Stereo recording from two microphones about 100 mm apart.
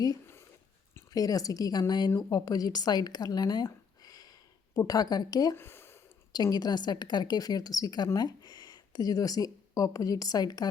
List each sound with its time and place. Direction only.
1.1 s a woman's voice: 35° left (ahead or behind)
5.5 s a sound: 25° left (ahead or behind)
6.3 s a woman's voice: 40° left (ahead or behind)